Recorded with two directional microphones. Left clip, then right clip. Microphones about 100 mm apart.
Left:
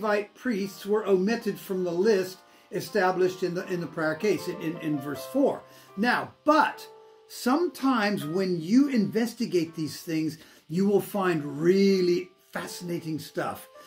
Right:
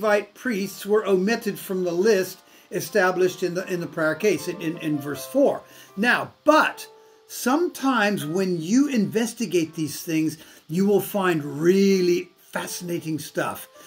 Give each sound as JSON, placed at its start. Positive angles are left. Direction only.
{"t": 0.0, "sound": "speech", "side_deg": -25}